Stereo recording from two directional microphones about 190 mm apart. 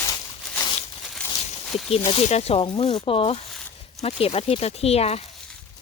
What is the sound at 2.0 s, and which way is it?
Speech, 35° left (ahead or behind).